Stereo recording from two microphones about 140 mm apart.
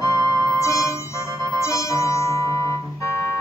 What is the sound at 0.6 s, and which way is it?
Music, 20° left (ahead or behind).